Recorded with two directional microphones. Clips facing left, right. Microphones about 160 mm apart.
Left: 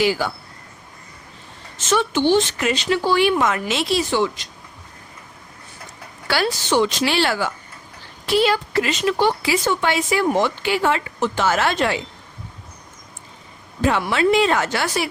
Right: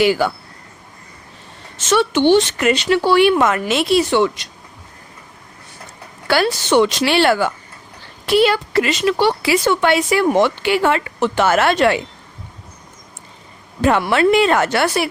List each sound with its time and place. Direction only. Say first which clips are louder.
0.0 s speech: right 5 dB; 60° right (ahead or behind)
1.9 s speech: right 4 dB; 75° right (ahead or behind)
6.2 s speech: right 4 dB; 60° right (ahead or behind)
13.8 s speech: right 4 dB; 60° right (ahead or behind)